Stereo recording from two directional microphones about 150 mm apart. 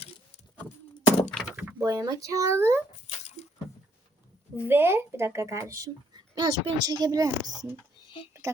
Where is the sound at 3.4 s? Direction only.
50° left (ahead or behind).